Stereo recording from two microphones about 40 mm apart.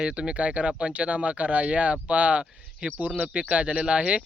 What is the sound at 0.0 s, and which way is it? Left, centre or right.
Speech, right.